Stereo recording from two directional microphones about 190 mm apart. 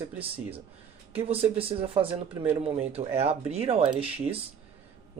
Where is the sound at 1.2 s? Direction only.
30° right (ahead or behind).